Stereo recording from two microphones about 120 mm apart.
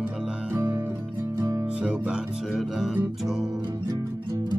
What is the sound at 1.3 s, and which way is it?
Music, 25° right (ahead or behind).